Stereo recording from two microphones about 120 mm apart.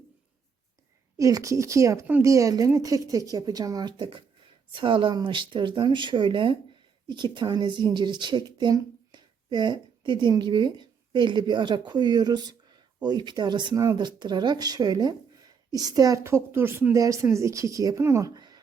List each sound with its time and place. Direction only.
1.1 s a woman's voice: 25° right (ahead or behind)